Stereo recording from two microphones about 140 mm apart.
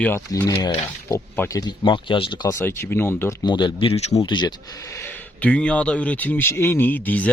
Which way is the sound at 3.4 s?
35° left (ahead or behind).